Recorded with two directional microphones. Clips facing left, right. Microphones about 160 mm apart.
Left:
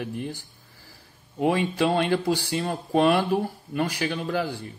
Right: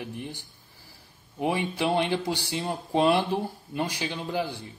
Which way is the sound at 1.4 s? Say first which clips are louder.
Left 4 dB; 15° right (ahead or behind).